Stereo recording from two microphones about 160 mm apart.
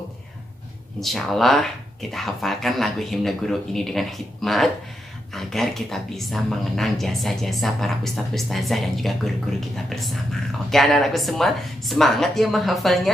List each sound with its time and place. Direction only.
0.9 s speech: centre (ahead or behind)